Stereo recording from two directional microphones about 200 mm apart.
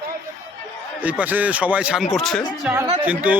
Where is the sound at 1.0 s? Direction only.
5° right (ahead or behind).